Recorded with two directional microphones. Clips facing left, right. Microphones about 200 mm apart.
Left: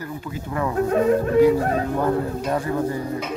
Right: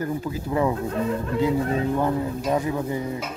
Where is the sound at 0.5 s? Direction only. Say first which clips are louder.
Right 3 dB; 20° right (ahead or behind).